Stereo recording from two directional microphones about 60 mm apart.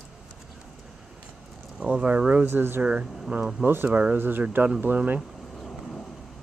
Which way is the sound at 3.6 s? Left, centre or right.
Right.